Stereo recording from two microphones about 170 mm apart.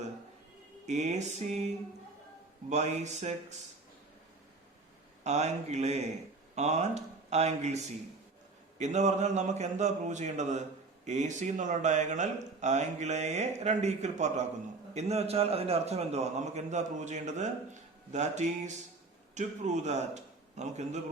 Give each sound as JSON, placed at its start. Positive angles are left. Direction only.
{"t": 0.9, "sound": "speech", "side_deg": -45}
{"t": 2.6, "sound": "speech", "side_deg": -40}
{"t": 5.2, "sound": "a man's voice", "side_deg": -40}